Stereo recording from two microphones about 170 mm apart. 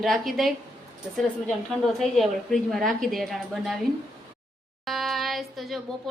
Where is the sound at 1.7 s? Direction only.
5° left (ahead or behind).